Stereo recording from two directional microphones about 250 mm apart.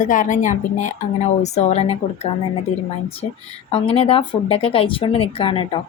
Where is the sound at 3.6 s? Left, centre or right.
Left.